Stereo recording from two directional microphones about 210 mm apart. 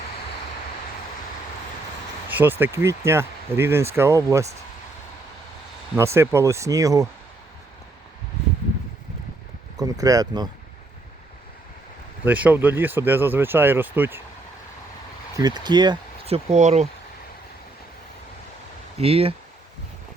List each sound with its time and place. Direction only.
2.3 s speech: 10° right (ahead or behind)
6.0 s speech: 10° right (ahead or behind)
9.7 s speech: 15° right (ahead or behind)
12.2 s speech: 5° right (ahead or behind)
15.4 s speech: 20° right (ahead or behind)
18.9 s speech: 30° right (ahead or behind)